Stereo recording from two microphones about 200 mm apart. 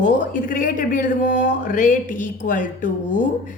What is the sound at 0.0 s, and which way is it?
A woman's voice, 40° left (ahead or behind).